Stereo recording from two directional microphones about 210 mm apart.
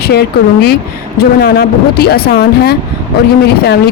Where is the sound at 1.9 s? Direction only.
50° left (ahead or behind).